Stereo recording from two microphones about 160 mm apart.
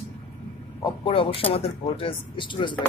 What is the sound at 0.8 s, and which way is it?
Speech, 30° left (ahead or behind).